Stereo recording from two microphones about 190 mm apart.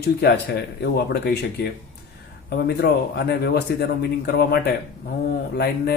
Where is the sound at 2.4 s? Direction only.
60° left (ahead or behind).